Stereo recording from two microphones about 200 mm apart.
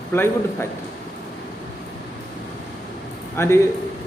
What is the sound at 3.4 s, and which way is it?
Speech, 10° left (ahead or behind).